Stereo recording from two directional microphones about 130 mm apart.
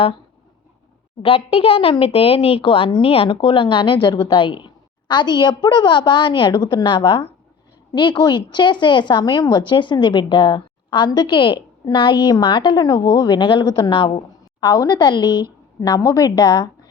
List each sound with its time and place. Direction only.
1.2 s a woman's voice: 45° left (ahead or behind)